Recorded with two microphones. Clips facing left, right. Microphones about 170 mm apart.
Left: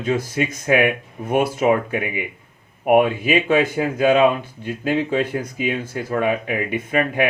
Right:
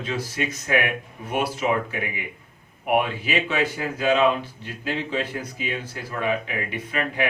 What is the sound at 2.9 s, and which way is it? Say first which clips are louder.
Speech: left 7 dB; 50° left (ahead or behind).